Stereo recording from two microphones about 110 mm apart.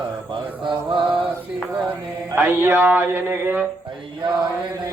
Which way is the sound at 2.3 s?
20° right (ahead or behind).